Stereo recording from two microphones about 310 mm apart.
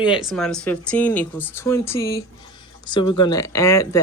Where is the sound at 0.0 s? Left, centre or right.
Centre.